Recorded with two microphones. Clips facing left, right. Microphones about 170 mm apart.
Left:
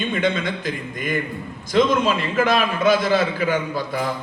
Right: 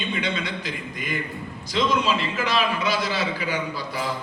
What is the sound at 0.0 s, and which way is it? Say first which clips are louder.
A man's voice: left 6 dB; 50° left (ahead or behind).